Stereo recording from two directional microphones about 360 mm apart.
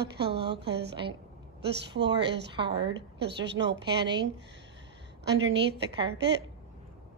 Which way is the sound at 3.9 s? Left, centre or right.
Centre.